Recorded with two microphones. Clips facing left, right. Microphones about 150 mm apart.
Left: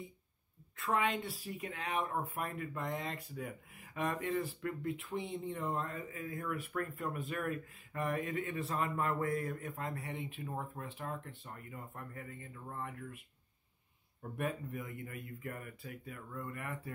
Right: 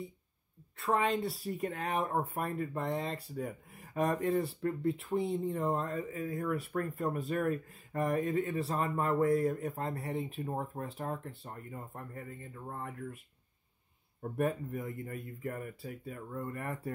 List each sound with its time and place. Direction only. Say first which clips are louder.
0.7 s speech: right 4 dB; 35° right (ahead or behind)
14.2 s speech: right 6 dB; 40° right (ahead or behind)